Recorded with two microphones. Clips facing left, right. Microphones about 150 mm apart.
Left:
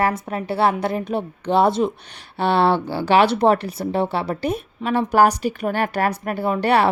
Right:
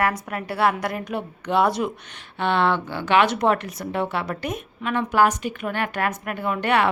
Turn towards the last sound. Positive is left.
turn(degrees=35)  # may be behind; listen again after turning